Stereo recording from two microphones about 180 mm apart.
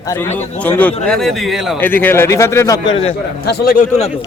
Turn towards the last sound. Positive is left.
turn(degrees=55)  # may be behind; listen again after turning